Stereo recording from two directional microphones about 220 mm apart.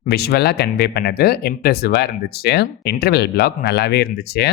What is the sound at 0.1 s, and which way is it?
Speech, 45° left (ahead or behind).